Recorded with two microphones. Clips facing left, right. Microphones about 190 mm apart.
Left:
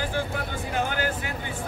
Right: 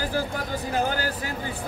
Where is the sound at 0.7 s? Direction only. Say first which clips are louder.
Right 1 dB; 35° right (ahead or behind).